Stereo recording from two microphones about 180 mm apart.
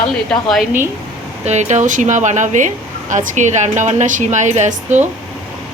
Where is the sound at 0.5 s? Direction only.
Centre (ahead or behind).